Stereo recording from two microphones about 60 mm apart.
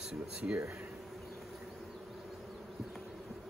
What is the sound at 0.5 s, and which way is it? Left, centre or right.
Speech, right.